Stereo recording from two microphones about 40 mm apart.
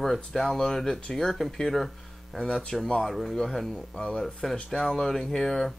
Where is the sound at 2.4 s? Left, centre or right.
Centre.